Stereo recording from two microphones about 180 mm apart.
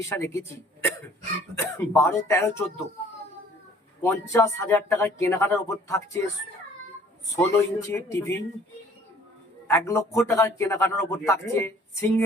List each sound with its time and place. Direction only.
0.0 s a man's voice: 15° left (ahead or behind)
1.5 s a man's voice: 15° left (ahead or behind)
4.0 s a man's voice: 15° left (ahead or behind)
7.3 s a man's voice: 15° left (ahead or behind)
9.6 s a man's voice: 15° left (ahead or behind)